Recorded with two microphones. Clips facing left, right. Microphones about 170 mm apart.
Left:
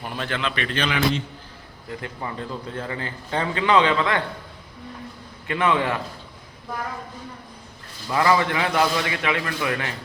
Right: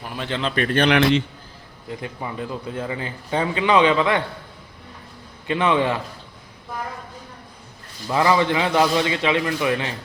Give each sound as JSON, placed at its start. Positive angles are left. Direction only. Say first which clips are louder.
{"t": 0.2, "sound": "a man's voice", "louder": "right 2 dB", "side_deg": -25}
{"t": 0.4, "sound": "a man's voice", "louder": "right 9 dB", "side_deg": -45}
{"t": 1.9, "sound": "a man's voice", "louder": "right 1 dB", "side_deg": -15}
{"t": 5.5, "sound": "a man's voice", "louder": "right 2 dB", "side_deg": -20}
{"t": 8.1, "sound": "a man's voice", "louder": "right 2 dB", "side_deg": -20}